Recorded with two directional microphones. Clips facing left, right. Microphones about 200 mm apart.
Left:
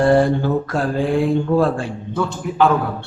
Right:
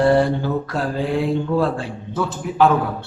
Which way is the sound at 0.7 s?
50° left (ahead or behind).